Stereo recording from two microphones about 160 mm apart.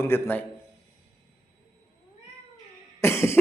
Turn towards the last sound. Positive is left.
turn(degrees=15)  # may be behind; listen again after turning